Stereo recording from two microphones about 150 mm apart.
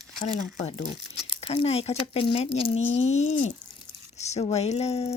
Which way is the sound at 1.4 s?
40° left (ahead or behind).